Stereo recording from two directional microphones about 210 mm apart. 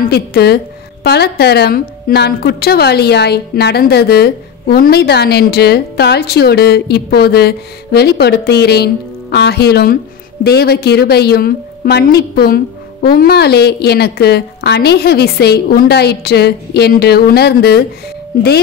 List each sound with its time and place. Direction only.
0.0 s a woman's voice: 50° left (ahead or behind)